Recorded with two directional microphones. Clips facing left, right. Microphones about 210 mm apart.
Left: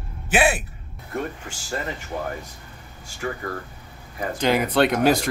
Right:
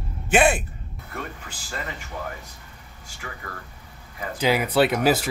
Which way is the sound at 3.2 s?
40° left (ahead or behind).